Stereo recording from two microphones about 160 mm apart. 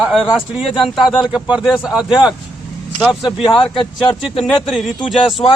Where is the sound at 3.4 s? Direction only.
30° left (ahead or behind).